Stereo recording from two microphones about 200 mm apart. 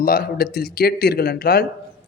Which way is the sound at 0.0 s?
50° left (ahead or behind).